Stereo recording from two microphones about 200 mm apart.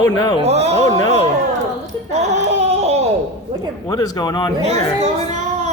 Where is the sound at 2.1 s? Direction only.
35° right (ahead or behind).